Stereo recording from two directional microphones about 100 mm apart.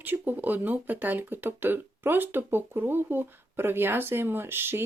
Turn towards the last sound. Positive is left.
turn(degrees=-20)  # may be behind; listen again after turning